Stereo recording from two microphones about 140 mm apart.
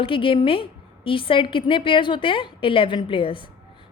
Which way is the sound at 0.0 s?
40° left (ahead or behind).